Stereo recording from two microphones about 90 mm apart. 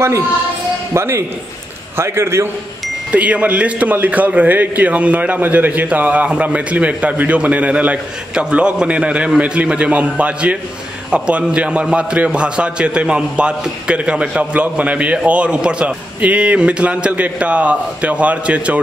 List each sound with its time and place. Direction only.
0.9 s a man's voice: 30° right (ahead or behind)
3.1 s a man's voice: 15° right (ahead or behind)